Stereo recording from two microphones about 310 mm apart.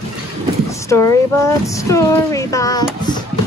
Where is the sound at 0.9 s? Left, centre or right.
Centre.